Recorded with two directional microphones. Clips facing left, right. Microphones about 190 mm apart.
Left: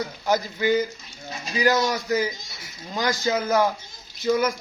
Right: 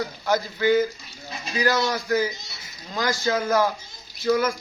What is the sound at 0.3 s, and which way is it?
A man's voice, 15° left (ahead or behind).